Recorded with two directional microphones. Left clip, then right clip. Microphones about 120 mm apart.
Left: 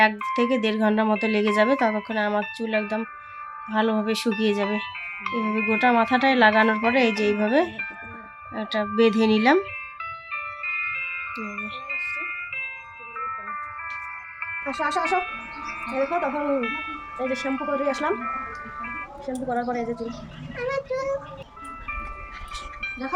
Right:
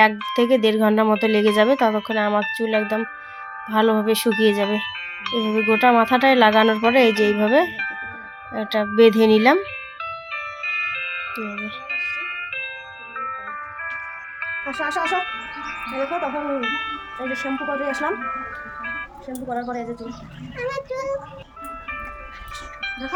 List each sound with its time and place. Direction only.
0.0 s speech: 25° right (ahead or behind)
10.0 s music: 30° right (ahead or behind)
11.3 s speech: 30° right (ahead or behind)
11.9 s music: 35° right (ahead or behind)
14.8 s speech: 5° left (ahead or behind)
15.0 s speech: 35° right (ahead or behind)
18.1 s ice cream truck: 35° right (ahead or behind)
19.5 s a woman's voice: 5° left (ahead or behind)
20.6 s a sound: 50° right (ahead or behind)
20.9 s child singing: 15° right (ahead or behind)
22.8 s wind chime: 35° right (ahead or behind)